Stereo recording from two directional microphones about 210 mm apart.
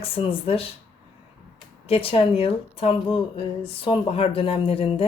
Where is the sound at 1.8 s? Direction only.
25° left (ahead or behind).